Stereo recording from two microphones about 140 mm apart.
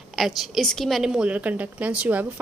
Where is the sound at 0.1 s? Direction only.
Centre (ahead or behind).